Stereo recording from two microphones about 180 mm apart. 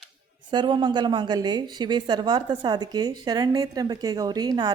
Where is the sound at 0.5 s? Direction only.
25° right (ahead or behind).